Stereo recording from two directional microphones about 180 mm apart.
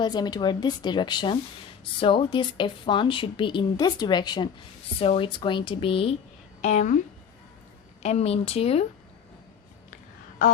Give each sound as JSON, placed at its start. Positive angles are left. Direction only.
{"t": 0.0, "sound": "speech", "side_deg": 25}
{"t": 8.0, "sound": "speech", "side_deg": 35}